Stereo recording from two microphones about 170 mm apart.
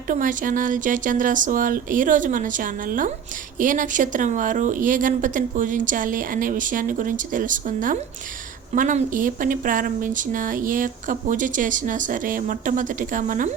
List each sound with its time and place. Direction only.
0.1 s speech: 50° right (ahead or behind)